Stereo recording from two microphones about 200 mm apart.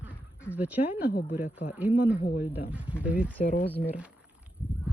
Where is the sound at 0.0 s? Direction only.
5° right (ahead or behind).